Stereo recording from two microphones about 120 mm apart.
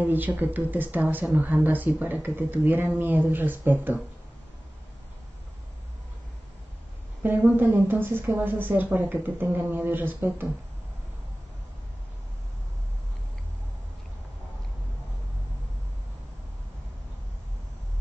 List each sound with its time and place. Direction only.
0.0 s speech: 15° right (ahead or behind)
7.2 s speech: 15° right (ahead or behind)